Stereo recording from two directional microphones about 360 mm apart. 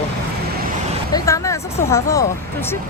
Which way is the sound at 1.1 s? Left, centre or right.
Centre.